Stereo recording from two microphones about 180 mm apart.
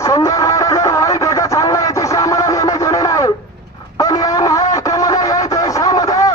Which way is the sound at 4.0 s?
20° left (ahead or behind).